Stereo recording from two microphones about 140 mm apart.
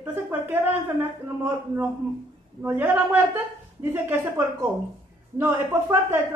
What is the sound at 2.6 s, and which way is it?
A woman's voice, 15° right (ahead or behind).